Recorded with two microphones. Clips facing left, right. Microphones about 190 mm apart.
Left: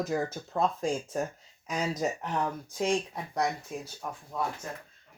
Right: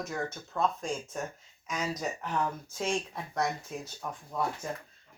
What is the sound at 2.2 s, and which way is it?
Speech, 15° left (ahead or behind).